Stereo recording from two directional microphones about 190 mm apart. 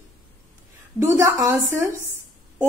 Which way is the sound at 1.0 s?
15° right (ahead or behind).